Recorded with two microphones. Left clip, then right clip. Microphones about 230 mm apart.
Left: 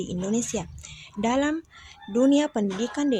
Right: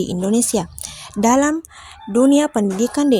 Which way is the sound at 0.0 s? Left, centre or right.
Right.